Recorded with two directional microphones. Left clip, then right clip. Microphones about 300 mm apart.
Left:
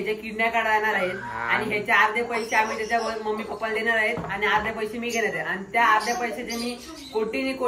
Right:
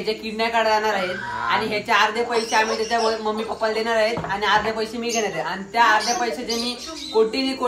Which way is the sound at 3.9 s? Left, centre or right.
Centre.